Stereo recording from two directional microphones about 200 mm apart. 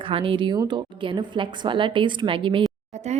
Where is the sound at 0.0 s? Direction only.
25° right (ahead or behind).